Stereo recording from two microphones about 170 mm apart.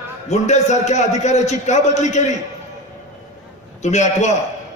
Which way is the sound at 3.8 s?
40° left (ahead or behind).